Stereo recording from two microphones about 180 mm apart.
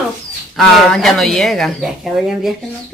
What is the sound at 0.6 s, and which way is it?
Speech, centre (ahead or behind).